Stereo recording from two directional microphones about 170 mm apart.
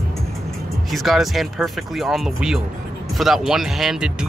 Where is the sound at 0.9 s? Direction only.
Centre (ahead or behind).